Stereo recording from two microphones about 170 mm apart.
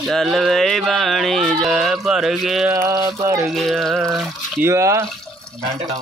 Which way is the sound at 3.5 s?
Centre (ahead or behind).